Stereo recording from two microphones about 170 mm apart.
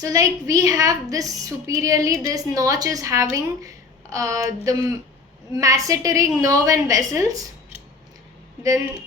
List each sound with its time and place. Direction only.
0.0 s a woman's voice: 20° right (ahead or behind)